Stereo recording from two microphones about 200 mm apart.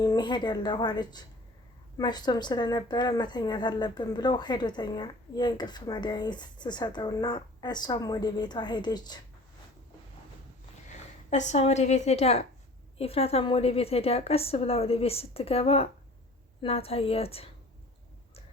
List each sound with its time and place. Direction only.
0.0 s a woman's voice: 20° left (ahead or behind)
11.3 s a woman's voice: 35° left (ahead or behind)